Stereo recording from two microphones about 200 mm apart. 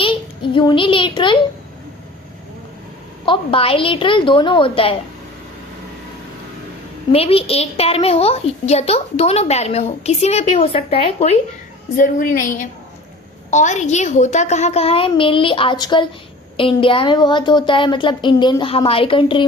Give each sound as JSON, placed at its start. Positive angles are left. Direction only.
{"t": 0.0, "sound": "a child's voice", "side_deg": 25}
{"t": 3.2, "sound": "speech", "side_deg": 25}
{"t": 7.1, "sound": "a woman's voice", "side_deg": 30}